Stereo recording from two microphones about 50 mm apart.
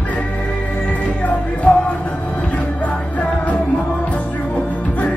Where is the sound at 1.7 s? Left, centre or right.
Centre.